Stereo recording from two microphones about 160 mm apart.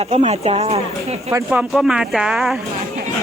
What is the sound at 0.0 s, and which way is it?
Speech, 40° right (ahead or behind).